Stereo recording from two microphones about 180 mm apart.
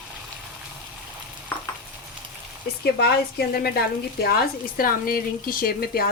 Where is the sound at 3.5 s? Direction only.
60° left (ahead or behind).